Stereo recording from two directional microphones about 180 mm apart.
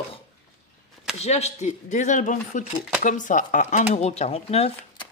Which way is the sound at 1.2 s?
35° left (ahead or behind).